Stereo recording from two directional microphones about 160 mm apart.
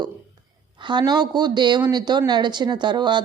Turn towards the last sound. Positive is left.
turn(degrees=-30)  # may be behind; listen again after turning